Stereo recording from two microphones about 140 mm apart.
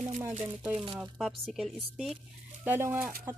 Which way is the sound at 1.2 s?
Centre (ahead or behind).